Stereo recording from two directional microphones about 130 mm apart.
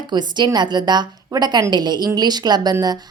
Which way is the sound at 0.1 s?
35° right (ahead or behind).